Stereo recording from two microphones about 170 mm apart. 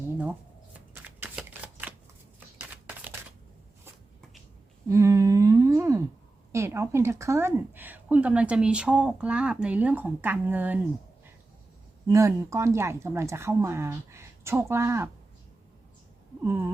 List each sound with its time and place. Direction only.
0.2 s shuffling cards: 10° right (ahead or behind)
2.6 s a sound: 10° right (ahead or behind)
4.9 s humming: 20° right (ahead or behind)
6.5 s a woman's voice: 15° right (ahead or behind)
12.0 s a woman's voice: 15° right (ahead or behind)
16.4 s a woman's voice: 15° right (ahead or behind)